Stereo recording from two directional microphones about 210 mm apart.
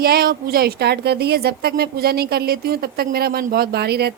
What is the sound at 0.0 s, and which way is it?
A woman's voice, 45° right (ahead or behind).